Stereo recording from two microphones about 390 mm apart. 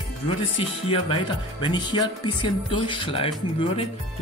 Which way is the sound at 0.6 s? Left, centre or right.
Centre.